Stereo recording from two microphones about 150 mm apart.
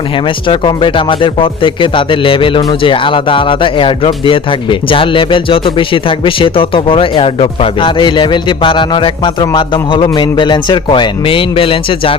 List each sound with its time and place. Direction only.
0.4 s speech: 35° left (ahead or behind)